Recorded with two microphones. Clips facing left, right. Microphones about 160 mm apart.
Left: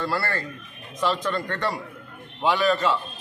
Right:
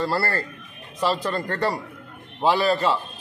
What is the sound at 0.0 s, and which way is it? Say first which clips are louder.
Speech: right 3 dB; 35° right (ahead or behind).